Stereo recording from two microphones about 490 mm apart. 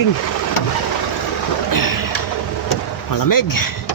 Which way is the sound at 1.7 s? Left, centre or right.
Left.